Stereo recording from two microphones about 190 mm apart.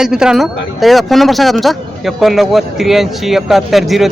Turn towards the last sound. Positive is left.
turn(degrees=0)  # may be behind; listen again after turning